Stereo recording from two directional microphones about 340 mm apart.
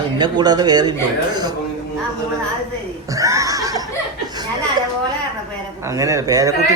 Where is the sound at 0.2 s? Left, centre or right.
Centre.